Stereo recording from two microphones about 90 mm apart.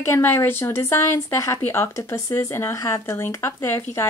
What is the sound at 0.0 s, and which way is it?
A woman's voice, 30° left (ahead or behind).